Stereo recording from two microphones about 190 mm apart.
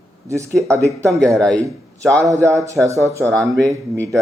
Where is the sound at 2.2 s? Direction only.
15° right (ahead or behind).